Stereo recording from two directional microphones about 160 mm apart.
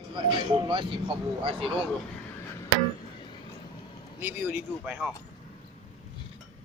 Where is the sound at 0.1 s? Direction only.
30° right (ahead or behind).